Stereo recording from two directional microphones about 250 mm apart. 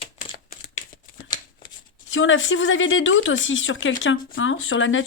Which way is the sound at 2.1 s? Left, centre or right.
Left.